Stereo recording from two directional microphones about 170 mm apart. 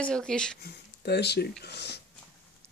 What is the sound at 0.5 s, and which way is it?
Speech, 75° left (ahead or behind).